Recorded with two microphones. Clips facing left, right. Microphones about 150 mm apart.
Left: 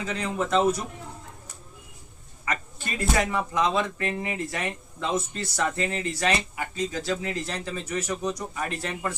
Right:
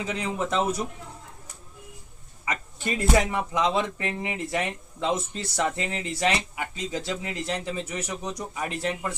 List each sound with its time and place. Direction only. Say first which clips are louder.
0.0 s speech: even; 20° right (ahead or behind)
2.4 s a sound: even; 20° right (ahead or behind)
3.3 s speech: even; 20° right (ahead or behind)